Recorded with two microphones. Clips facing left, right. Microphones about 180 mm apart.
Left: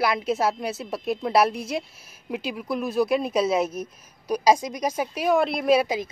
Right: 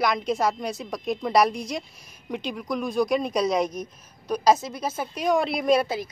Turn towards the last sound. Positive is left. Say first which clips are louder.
# left 2 dB
turn(degrees=20)  # may be behind; listen again after turning